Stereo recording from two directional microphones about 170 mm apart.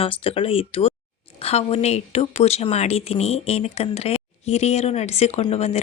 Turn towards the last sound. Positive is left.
turn(degrees=40)  # may be behind; listen again after turning